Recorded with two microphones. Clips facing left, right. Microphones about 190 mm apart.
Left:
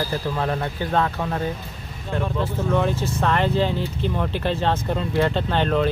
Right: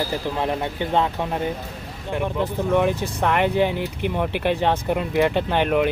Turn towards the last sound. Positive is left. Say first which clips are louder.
# right 1 dB
turn(degrees=-15)  # may be behind; listen again after turning